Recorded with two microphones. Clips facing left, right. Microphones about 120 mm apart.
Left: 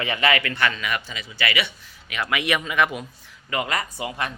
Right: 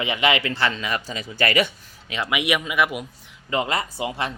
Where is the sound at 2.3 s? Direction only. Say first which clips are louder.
Right 1 dB; 15° right (ahead or behind).